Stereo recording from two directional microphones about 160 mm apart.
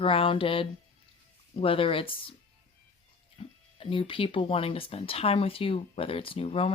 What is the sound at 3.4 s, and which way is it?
Speech, 30° left (ahead or behind).